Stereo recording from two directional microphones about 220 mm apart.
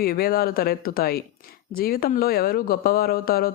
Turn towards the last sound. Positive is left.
turn(degrees=45)  # may be behind; listen again after turning